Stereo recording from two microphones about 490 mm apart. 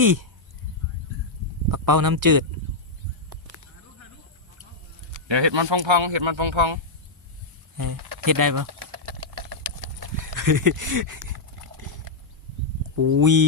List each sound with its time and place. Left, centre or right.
0.0 s speech: right
1.7 s speech: right
5.3 s speech: right
7.8 s typing: right
9.8 s a sound: right
13.0 s speech: right